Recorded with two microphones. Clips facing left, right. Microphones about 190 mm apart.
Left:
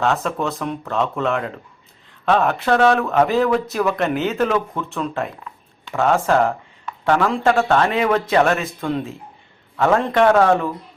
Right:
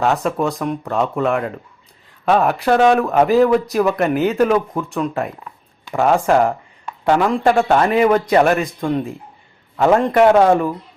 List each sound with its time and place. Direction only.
0.0 s a man's voice: 10° right (ahead or behind)